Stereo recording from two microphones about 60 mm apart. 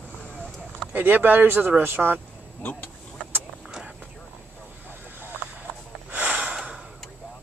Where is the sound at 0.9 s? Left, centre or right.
Right.